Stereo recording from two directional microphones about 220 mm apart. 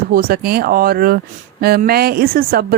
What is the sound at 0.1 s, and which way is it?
Speech, 40° right (ahead or behind).